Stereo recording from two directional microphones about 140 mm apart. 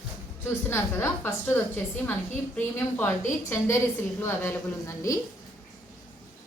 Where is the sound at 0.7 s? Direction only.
15° left (ahead or behind).